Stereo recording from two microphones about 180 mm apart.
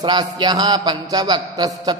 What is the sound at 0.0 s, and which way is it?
Speech, 25° right (ahead or behind).